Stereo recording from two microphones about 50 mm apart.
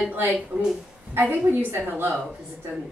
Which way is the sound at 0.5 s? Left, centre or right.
Right.